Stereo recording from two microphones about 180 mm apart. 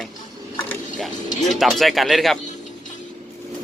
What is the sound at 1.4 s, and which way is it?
Speech, centre (ahead or behind).